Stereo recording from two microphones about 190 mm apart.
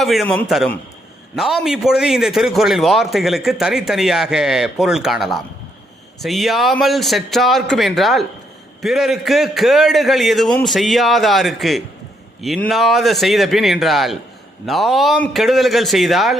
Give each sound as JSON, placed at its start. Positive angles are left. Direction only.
{"t": 0.0, "sound": "a man's voice", "side_deg": 0}